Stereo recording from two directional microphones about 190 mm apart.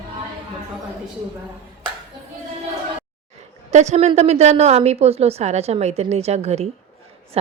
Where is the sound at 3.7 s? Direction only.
35° right (ahead or behind).